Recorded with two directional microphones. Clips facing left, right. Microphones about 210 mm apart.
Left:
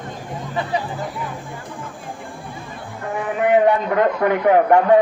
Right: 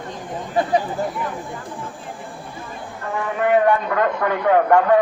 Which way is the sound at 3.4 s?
20° left (ahead or behind).